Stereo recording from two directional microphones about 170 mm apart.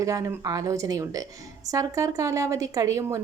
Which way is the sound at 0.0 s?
20° right (ahead or behind).